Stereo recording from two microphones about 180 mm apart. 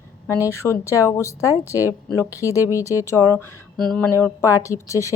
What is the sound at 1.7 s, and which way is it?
Speech, 10° right (ahead or behind).